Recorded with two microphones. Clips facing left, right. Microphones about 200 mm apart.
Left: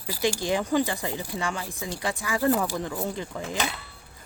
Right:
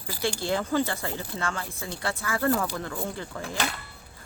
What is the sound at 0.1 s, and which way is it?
Speech, 15° left (ahead or behind).